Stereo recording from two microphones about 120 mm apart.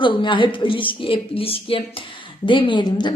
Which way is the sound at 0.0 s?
40° left (ahead or behind).